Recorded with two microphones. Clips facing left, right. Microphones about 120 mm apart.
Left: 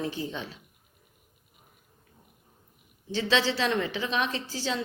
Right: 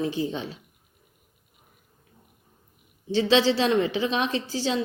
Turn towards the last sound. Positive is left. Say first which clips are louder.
# right 5 dB
turn(degrees=-15)  # may be behind; listen again after turning